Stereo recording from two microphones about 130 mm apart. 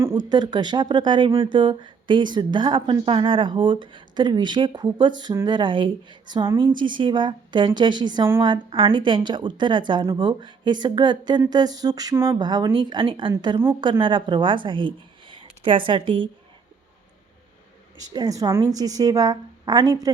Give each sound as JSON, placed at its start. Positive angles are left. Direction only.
{"t": 0.3, "sound": "a woman's voice", "side_deg": -35}
{"t": 12.4, "sound": "speech", "side_deg": -35}
{"t": 18.1, "sound": "a woman's voice", "side_deg": -30}